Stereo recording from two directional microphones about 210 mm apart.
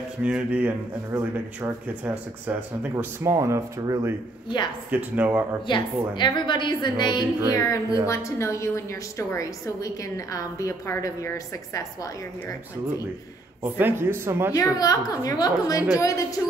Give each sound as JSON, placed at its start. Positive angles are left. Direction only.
{"t": 0.2, "sound": "speech", "side_deg": -5}
{"t": 5.7, "sound": "a woman's voice", "side_deg": 20}
{"t": 13.6, "sound": "speech", "side_deg": -10}
{"t": 14.5, "sound": "a woman's voice", "side_deg": 15}